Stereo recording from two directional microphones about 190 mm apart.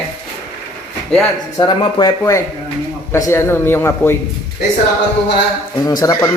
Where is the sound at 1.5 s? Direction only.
25° left (ahead or behind).